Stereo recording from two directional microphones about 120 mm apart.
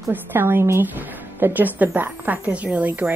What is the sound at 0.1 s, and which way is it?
A woman's voice, 15° right (ahead or behind).